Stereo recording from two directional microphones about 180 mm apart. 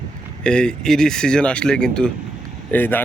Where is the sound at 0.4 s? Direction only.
5° left (ahead or behind).